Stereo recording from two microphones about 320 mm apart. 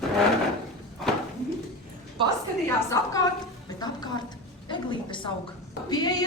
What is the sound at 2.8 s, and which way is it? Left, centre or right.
Speech, centre.